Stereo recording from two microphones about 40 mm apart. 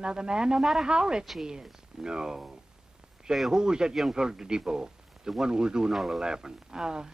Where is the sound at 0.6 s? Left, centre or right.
Centre.